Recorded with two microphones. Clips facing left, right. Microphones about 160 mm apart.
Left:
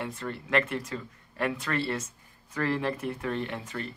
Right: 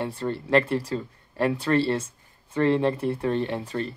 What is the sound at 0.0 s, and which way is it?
Speech, 30° right (ahead or behind).